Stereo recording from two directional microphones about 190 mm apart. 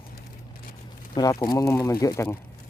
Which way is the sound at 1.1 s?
20° left (ahead or behind).